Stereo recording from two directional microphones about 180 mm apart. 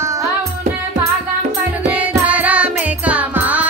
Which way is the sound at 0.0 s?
15° right (ahead or behind).